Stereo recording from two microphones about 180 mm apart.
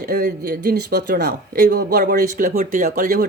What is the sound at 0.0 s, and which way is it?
Speech, 60° right (ahead or behind).